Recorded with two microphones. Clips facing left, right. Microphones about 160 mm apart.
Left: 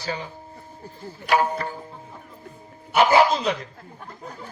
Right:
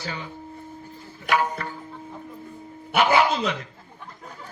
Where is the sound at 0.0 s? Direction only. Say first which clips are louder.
Left 3 dB; 35° left (ahead or behind).